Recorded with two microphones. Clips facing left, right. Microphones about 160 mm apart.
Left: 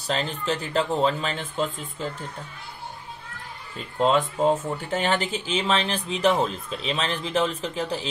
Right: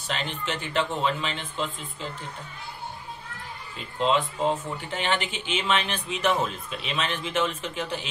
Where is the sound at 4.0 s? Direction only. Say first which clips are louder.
Left 3 dB; 45° left (ahead or behind).